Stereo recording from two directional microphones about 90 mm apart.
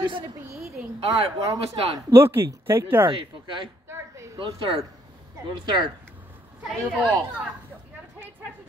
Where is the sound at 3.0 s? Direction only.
65° right (ahead or behind).